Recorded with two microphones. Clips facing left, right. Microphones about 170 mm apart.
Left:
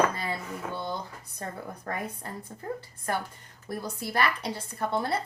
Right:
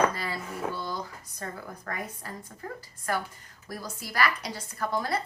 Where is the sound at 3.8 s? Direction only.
25° left (ahead or behind).